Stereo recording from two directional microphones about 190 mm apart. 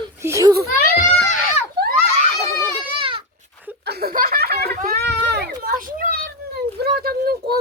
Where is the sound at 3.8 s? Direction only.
55° right (ahead or behind).